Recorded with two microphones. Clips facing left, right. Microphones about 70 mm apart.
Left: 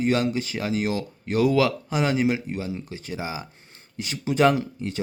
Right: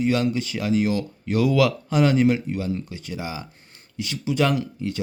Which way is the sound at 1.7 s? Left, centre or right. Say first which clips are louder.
Right 4 dB; centre.